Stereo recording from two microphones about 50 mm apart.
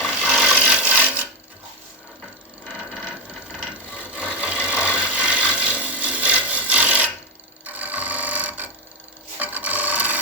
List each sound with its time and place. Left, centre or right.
0.0 s wood: centre
4.1 s wood: right
7.6 s sewing machine: right
9.4 s filing: right